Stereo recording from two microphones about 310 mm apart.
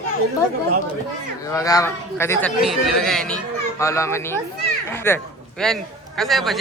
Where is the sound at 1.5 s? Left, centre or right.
Centre.